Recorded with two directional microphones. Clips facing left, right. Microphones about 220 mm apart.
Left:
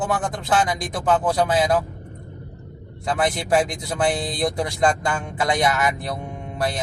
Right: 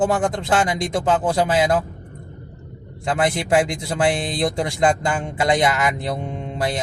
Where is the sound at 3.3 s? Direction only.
25° right (ahead or behind).